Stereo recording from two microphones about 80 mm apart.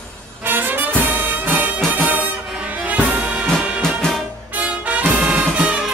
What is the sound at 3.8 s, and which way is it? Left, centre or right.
Music, centre.